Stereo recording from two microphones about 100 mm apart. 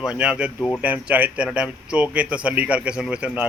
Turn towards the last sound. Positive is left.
turn(degrees=-15)  # may be behind; listen again after turning